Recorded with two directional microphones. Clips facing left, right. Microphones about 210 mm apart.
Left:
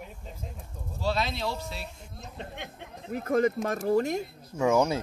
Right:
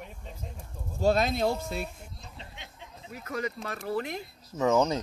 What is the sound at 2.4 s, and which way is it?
Speech, 55° left (ahead or behind).